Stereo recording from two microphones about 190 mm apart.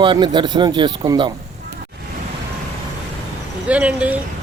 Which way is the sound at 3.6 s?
5° right (ahead or behind).